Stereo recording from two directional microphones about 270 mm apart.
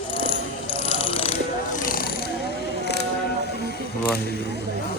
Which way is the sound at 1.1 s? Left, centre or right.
Left.